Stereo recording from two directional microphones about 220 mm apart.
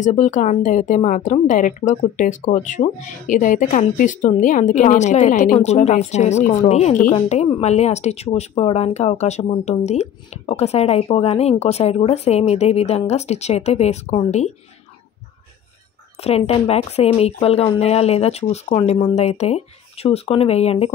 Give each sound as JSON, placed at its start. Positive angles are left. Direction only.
{"t": 0.0, "sound": "a woman's voice", "side_deg": 35}
{"t": 16.2, "sound": "speech", "side_deg": 25}